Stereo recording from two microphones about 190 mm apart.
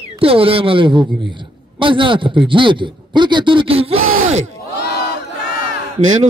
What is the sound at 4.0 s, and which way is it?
Groan, 90° right.